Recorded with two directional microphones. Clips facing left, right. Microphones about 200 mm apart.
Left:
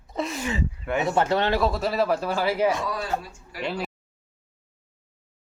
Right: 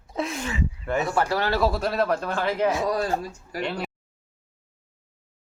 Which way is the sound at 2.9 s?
40° right (ahead or behind).